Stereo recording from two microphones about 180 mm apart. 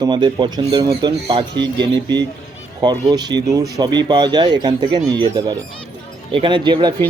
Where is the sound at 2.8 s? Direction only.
25° right (ahead or behind).